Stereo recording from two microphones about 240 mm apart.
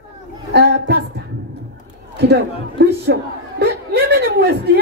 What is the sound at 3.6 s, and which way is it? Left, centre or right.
Chuckle, right.